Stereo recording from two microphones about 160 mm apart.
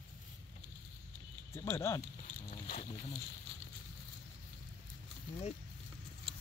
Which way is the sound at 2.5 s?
45° left (ahead or behind).